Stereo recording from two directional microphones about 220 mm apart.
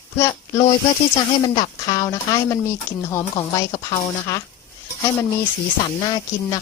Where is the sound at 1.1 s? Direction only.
20° left (ahead or behind).